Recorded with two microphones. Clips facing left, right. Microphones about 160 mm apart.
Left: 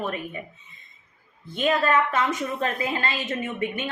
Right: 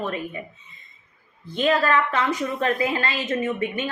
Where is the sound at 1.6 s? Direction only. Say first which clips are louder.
Right 1 dB; 25° left (ahead or behind).